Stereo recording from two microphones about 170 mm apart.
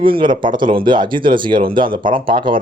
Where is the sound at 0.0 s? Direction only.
30° right (ahead or behind).